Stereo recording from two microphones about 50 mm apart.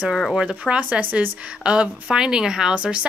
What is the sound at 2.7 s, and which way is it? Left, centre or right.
Speech, right.